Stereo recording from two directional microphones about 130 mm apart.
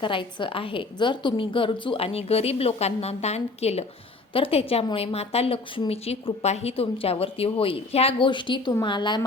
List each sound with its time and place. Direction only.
0.0 s a woman's voice: 40° left (ahead or behind)